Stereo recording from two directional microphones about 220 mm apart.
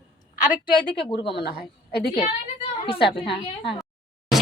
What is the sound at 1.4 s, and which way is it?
Speech, 45° left (ahead or behind).